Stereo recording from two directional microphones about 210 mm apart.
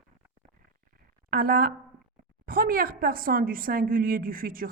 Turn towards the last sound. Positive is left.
turn(degrees=-40)  # may be behind; listen again after turning